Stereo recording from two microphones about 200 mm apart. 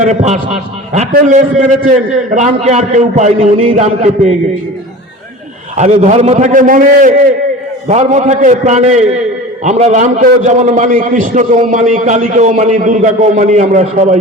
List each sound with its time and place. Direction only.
0.0 s a man's voice: 35° right (ahead or behind)
5.7 s a man's voice: 35° right (ahead or behind)